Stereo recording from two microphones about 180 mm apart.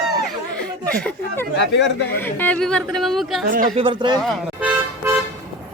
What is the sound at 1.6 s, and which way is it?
Speech, 75° left (ahead or behind).